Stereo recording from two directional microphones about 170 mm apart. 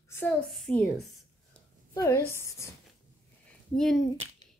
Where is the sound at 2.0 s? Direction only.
15° left (ahead or behind).